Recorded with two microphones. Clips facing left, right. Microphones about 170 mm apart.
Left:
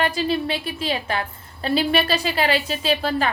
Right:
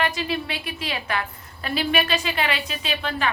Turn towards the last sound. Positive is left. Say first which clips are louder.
# left 6 dB
turn(degrees=35)  # may be behind; listen again after turning